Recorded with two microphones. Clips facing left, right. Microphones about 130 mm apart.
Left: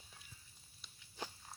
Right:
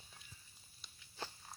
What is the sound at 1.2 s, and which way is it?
Walk, 15° left (ahead or behind).